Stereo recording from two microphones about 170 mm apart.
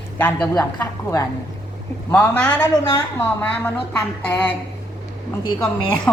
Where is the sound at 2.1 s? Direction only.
10° left (ahead or behind).